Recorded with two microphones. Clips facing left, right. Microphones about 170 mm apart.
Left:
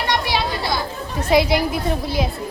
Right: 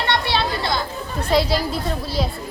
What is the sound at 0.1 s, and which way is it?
Chatter, 15° left (ahead or behind).